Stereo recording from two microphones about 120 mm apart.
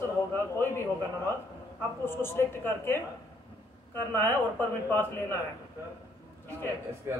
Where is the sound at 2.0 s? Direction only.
20° left (ahead or behind).